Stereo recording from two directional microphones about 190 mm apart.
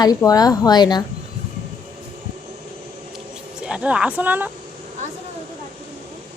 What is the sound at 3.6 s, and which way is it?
Speech, 5° right (ahead or behind).